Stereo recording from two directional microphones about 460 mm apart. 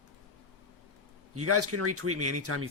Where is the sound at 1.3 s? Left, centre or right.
Right.